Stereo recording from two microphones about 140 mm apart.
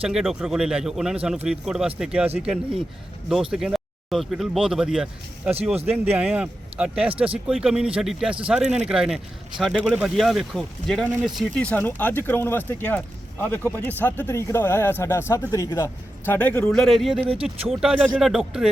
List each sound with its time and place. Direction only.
0.0 s speech: 5° right (ahead or behind); by 16.6 s 15° left (ahead or behind)
16.6 s speech: centre (ahead or behind)